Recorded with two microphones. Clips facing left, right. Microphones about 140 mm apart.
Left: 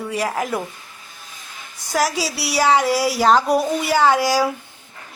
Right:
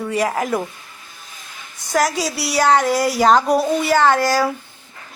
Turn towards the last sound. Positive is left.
turn(degrees=10)  # may be behind; listen again after turning